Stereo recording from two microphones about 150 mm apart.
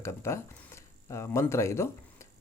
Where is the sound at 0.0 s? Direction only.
20° left (ahead or behind).